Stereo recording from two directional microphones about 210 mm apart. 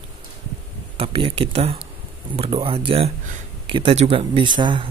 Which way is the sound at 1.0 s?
25° right (ahead or behind).